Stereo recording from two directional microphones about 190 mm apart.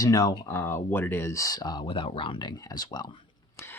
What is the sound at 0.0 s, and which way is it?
Speech, 20° left (ahead or behind).